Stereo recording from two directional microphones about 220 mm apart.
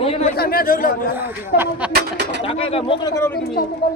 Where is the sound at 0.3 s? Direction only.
45° left (ahead or behind).